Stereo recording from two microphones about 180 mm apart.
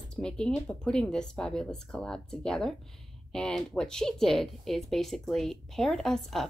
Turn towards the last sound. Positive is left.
turn(degrees=0)  # may be behind; listen again after turning